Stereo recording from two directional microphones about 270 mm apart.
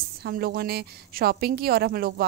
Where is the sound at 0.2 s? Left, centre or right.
Right.